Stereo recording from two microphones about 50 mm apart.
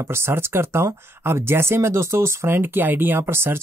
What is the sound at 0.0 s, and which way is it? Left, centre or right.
Speech, right.